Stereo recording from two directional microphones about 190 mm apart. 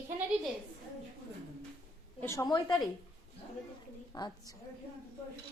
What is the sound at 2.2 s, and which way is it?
Speech, 15° left (ahead or behind).